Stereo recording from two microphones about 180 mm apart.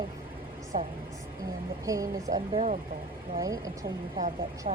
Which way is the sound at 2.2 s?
35° right (ahead or behind).